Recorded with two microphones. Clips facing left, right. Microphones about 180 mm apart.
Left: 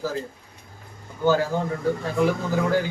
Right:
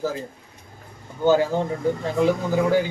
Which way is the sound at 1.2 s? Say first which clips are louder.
Right 3 dB; 20° right (ahead or behind).